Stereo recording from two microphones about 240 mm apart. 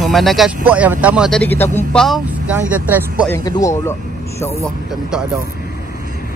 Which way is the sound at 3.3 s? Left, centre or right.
Centre.